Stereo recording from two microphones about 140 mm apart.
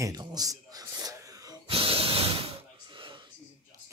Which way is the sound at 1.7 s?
40° right (ahead or behind).